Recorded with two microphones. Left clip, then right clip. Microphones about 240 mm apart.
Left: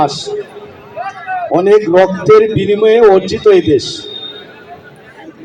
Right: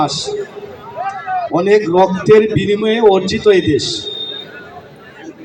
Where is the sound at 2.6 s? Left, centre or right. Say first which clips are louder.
Left 6 dB; right.